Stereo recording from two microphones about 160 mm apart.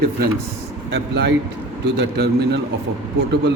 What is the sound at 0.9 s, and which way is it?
A man's voice, 90° right.